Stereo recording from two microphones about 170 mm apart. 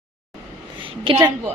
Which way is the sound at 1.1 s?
20° right (ahead or behind).